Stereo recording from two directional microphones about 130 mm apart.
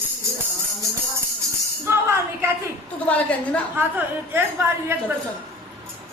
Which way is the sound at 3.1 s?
10° left (ahead or behind).